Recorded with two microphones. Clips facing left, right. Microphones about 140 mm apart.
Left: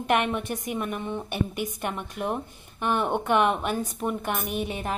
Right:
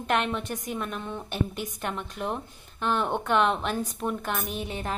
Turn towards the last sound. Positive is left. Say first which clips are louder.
# left 3 dB
turn(degrees=15)  # may be behind; listen again after turning